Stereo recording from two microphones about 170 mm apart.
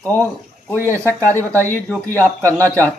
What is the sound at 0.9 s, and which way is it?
Speech, 15° right (ahead or behind).